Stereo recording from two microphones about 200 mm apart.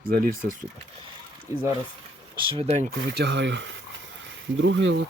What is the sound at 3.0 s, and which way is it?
Speech, 55° right (ahead or behind).